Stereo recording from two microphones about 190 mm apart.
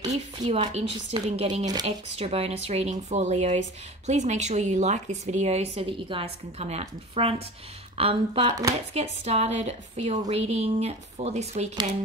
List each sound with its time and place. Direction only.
0.0 s speech: 35° right (ahead or behind)